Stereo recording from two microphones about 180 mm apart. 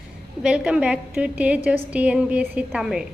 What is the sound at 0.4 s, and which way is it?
A woman's voice, 5° right (ahead or behind).